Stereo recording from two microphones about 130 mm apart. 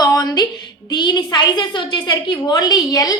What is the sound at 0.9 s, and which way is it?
A woman's voice, 35° left (ahead or behind).